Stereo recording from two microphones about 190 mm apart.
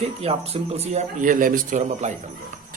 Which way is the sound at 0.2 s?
30° right (ahead or behind).